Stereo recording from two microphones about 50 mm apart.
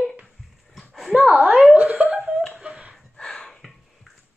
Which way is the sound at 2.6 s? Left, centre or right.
Right.